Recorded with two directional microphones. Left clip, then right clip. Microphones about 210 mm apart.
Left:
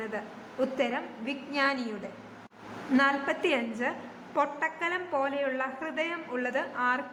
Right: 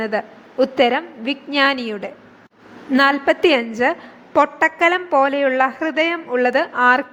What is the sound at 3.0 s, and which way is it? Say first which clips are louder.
A woman's voice: right 12 dB; 30° right (ahead or behind).